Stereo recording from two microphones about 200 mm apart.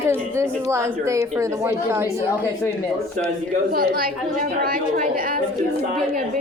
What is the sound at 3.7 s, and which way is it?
A woman's voice, 45° right (ahead or behind).